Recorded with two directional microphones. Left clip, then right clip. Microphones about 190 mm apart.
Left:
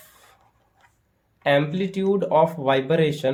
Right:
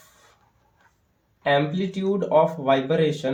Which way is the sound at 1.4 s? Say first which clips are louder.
Left 1 dB; 40° left (ahead or behind).